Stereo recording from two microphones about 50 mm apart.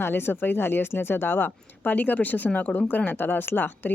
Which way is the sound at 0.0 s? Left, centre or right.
Left.